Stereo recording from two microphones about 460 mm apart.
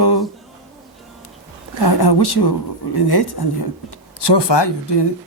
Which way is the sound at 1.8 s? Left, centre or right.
Left.